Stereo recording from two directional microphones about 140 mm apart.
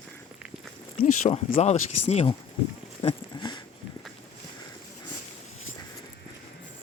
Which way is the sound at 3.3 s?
30° left (ahead or behind).